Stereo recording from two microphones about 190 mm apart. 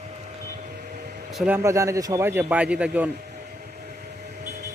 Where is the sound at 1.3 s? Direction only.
5° right (ahead or behind).